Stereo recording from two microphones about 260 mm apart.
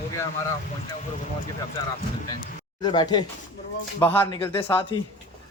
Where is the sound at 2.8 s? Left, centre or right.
Centre.